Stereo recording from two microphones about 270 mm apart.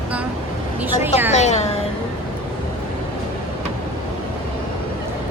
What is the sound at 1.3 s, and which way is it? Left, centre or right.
Speech, left.